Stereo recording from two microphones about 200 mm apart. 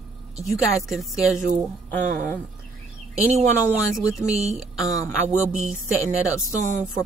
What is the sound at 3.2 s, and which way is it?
Speech, 35° right (ahead or behind).